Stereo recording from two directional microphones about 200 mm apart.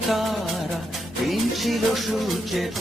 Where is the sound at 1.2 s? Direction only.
Centre (ahead or behind).